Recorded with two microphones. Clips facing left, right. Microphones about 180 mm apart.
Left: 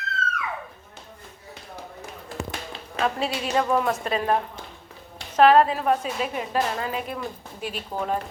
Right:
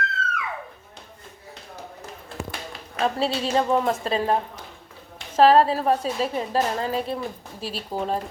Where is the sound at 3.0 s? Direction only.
30° right (ahead or behind).